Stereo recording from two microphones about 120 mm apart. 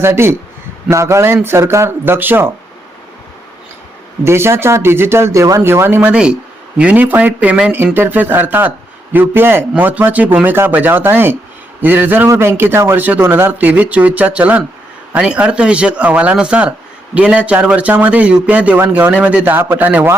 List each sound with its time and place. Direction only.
0.0 s speech: 20° right (ahead or behind)
4.2 s a man's voice: 20° right (ahead or behind)